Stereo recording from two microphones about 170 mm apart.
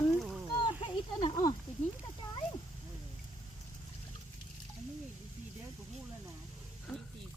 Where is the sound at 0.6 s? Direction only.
25° left (ahead or behind).